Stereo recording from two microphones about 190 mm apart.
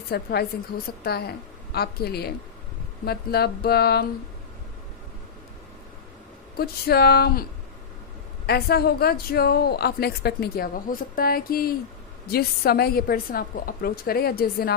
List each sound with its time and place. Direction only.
0.1 s a woman's voice: 55° left (ahead or behind)
6.6 s a woman's voice: 55° left (ahead or behind)
8.4 s a woman's voice: 55° left (ahead or behind)